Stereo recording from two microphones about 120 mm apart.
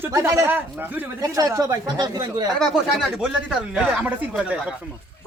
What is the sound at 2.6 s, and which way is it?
Speech, 5° right (ahead or behind).